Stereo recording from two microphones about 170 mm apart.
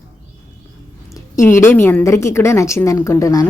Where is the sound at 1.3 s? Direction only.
15° left (ahead or behind).